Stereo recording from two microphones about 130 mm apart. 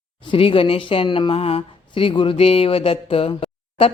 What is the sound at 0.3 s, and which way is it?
Speech, 45° left (ahead or behind).